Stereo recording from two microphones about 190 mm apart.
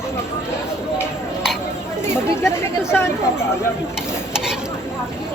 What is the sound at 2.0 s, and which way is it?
Speech, 15° left (ahead or behind).